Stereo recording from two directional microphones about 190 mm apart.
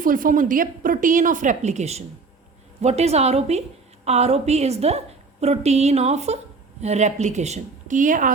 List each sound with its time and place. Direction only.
0.0 s a woman's voice: 45° right (ahead or behind)